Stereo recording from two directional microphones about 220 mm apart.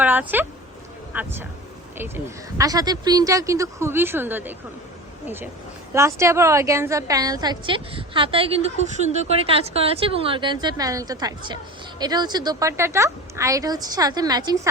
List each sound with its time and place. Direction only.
0.0 s a woman's voice: 10° right (ahead or behind)
5.9 s a woman's voice: 15° right (ahead or behind)